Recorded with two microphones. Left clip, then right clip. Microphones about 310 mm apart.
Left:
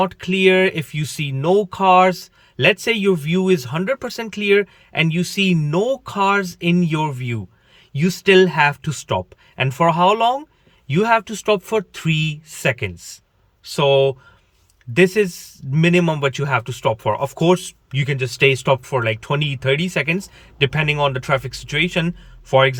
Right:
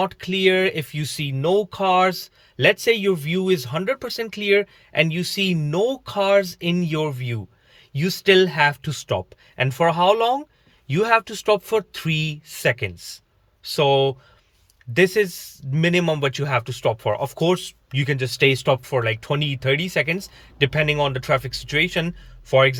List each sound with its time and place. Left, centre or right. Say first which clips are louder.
0.0 s speech: left 3 dB; centre